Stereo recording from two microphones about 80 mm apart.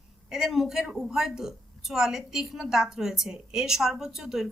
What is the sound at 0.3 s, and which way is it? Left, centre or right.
A woman's voice, centre.